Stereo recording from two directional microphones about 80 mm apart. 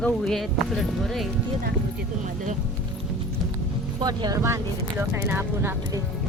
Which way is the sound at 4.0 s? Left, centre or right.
Right.